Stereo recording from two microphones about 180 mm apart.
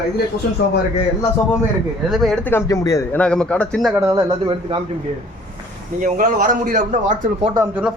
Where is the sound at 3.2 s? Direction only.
5° left (ahead or behind).